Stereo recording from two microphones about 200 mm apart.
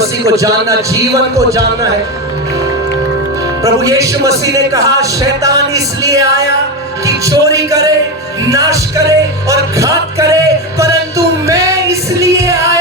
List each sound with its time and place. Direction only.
0.3 s speech: 15° right (ahead or behind)
3.6 s speech: 15° right (ahead or behind)
10.8 s music: 15° right (ahead or behind)